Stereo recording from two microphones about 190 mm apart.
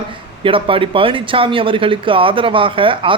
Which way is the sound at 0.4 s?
30° right (ahead or behind).